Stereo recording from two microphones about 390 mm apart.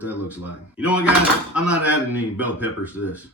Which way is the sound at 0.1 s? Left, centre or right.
Centre.